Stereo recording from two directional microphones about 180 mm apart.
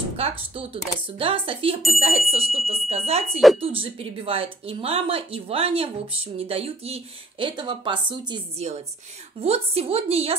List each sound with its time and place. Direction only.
1.1 s speech: 30° right (ahead or behind)